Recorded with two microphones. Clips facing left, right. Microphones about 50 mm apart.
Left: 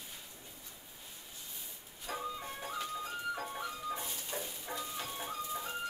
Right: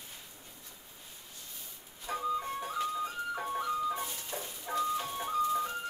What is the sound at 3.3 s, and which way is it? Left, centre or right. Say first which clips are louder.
Music: right 7 dB; centre.